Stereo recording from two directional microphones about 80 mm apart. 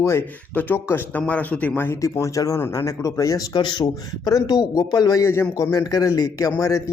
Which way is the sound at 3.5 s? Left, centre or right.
Left.